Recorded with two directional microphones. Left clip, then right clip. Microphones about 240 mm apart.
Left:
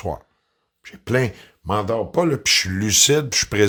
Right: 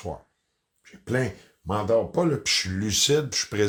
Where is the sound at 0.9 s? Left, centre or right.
Left.